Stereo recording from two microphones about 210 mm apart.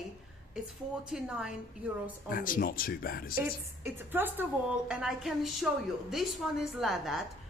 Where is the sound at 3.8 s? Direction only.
10° right (ahead or behind).